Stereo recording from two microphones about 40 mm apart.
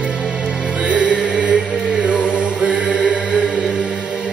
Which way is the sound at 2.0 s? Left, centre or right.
Right.